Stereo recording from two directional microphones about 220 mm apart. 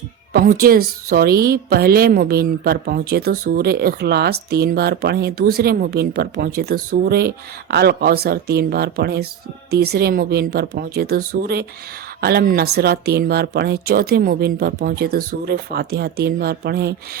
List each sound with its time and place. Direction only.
0.3 s a woman's voice: 40° right (ahead or behind)